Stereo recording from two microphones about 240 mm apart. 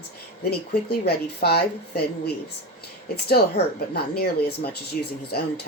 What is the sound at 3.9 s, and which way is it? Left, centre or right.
Speech, left.